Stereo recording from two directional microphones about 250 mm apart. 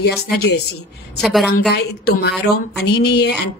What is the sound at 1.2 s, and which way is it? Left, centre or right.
Speech, centre.